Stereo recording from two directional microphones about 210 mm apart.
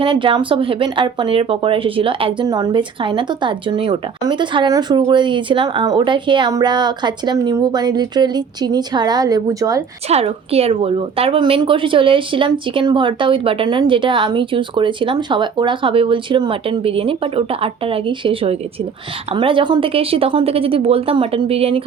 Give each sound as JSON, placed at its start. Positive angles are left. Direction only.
{"t": 0.0, "sound": "speech", "side_deg": -25}
{"t": 10.1, "sound": "speech", "side_deg": -30}